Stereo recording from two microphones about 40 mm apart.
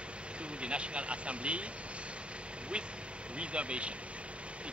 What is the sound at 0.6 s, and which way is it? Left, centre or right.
Vehicle, right.